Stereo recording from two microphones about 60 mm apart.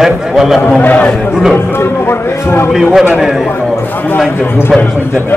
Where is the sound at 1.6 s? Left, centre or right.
Left.